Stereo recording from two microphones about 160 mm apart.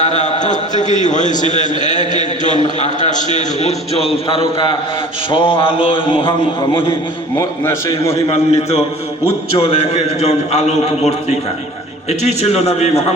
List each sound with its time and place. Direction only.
0.0 s a sound: 50° left (ahead or behind)
0.8 s a man's voice: 50° left (ahead or behind); by 6.3 s 35° left (ahead or behind)
7.3 s a man's voice: 20° left (ahead or behind)
8.1 s a man's voice: 40° left (ahead or behind)